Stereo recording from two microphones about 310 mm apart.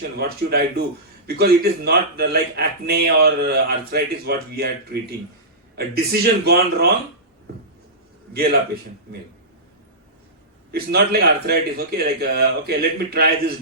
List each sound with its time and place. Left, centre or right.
0.2 s speech: right
8.3 s a man's voice: right
10.7 s speech: right